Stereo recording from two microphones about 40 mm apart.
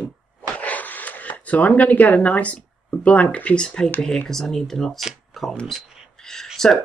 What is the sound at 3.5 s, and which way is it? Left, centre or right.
Speech, centre.